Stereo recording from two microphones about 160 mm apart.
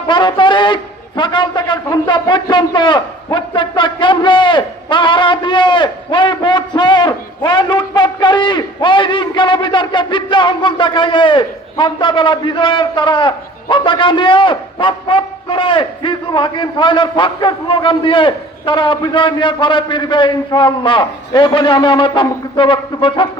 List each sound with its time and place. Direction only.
0.1 s a man's voice: 30° left (ahead or behind)